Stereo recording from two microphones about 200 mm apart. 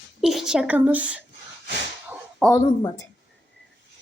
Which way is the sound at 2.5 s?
15° left (ahead or behind).